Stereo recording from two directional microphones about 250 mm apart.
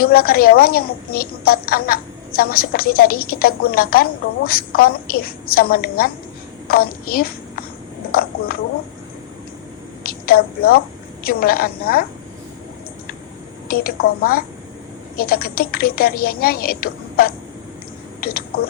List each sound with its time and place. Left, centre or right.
0.0 s a woman's voice: left
10.0 s a woman's voice: left
13.7 s a woman's voice: left